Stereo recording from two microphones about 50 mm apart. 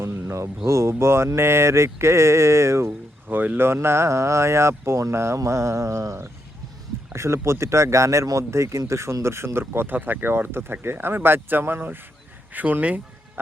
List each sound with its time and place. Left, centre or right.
0.0 s a sound: right
0.4 s speech: right
3.2 s speech: right
3.8 s speech: right
7.1 s speech: right